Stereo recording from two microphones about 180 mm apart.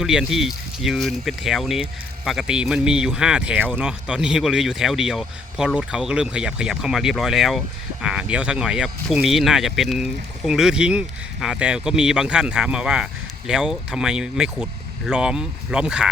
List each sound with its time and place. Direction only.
0.0 s speech: 5° right (ahead or behind)